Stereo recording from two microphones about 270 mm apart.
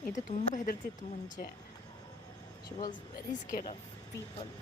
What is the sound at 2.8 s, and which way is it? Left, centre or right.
Speech, left.